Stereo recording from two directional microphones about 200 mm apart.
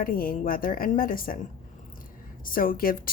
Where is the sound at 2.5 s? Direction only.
45° left (ahead or behind).